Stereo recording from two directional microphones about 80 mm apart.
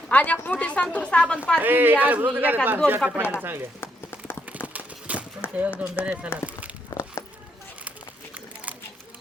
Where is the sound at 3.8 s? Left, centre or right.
Left.